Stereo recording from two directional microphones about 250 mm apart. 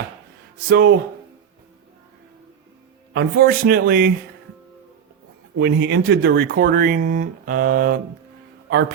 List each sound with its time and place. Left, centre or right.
0.7 s speech: right
3.1 s speech: right
5.5 s speech: right